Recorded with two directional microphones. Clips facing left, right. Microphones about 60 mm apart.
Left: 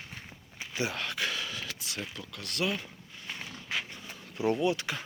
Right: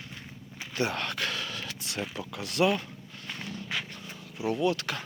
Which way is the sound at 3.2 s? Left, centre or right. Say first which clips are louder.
Right 2 dB; centre.